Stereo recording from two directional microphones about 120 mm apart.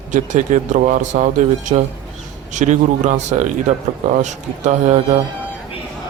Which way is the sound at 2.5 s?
75° right (ahead or behind).